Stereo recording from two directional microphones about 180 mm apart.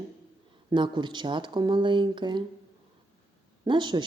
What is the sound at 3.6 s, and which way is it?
Speech, 25° right (ahead or behind).